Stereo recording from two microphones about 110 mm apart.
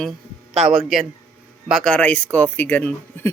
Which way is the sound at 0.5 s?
5° right (ahead or behind).